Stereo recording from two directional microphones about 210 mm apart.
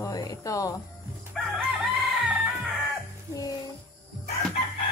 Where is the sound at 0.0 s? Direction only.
15° left (ahead or behind).